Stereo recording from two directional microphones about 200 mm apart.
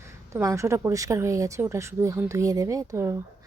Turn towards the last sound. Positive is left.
turn(degrees=-15)  # may be behind; listen again after turning